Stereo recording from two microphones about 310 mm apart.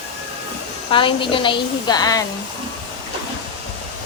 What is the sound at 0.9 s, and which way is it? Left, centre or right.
A woman's voice, centre.